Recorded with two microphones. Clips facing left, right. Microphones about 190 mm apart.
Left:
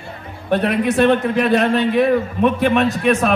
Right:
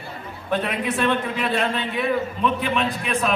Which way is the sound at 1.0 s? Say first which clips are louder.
Left 8 dB; 45° left (ahead or behind).